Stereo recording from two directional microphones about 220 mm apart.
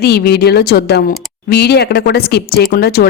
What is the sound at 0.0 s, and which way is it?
Speech, 45° left (ahead or behind).